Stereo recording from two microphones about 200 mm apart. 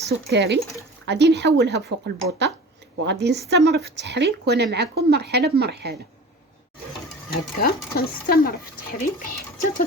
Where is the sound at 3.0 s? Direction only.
60° right (ahead or behind).